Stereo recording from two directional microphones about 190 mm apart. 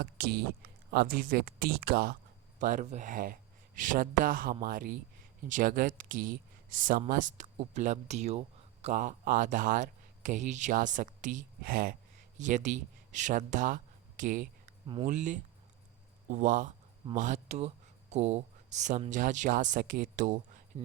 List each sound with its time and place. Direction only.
0.0 s speech: 50° right (ahead or behind)
12.4 s speech: 40° right (ahead or behind)